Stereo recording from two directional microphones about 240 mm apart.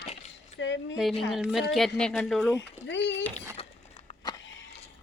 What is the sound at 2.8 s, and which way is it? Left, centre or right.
Speech, left.